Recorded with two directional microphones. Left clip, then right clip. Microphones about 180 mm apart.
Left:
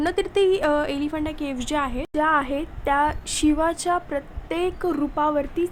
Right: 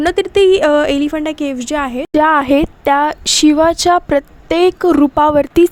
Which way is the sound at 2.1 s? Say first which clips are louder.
Right 11 dB; 55° right (ahead or behind).